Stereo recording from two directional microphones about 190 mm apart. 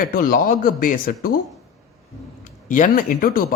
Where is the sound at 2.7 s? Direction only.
45° left (ahead or behind).